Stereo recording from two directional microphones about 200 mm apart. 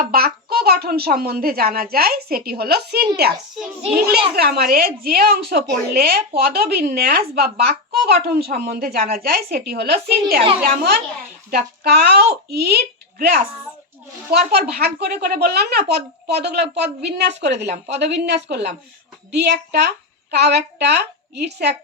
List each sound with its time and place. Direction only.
0.1 s a child's voice: 50° right (ahead or behind)
4.4 s speech: 50° right (ahead or behind)
11.5 s a woman's voice: 50° right (ahead or behind)